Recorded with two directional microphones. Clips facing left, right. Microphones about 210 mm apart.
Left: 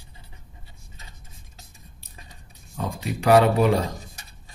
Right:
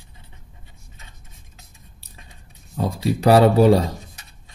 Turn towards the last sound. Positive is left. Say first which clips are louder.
# right 6 dB
turn(degrees=-35)  # may be behind; listen again after turning